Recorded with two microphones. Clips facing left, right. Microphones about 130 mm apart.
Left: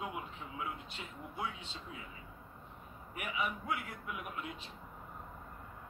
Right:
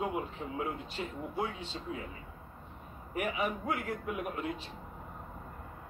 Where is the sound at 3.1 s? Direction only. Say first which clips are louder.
Right 5 dB; 40° right (ahead or behind).